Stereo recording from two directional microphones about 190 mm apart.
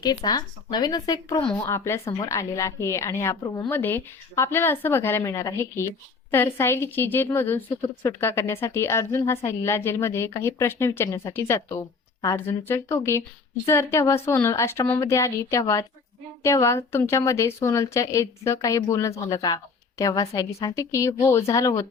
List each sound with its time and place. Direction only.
0.0 s speech: 20° left (ahead or behind)
1.4 s a woman's voice: 10° left (ahead or behind)